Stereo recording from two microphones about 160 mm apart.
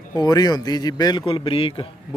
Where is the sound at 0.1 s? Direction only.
25° left (ahead or behind).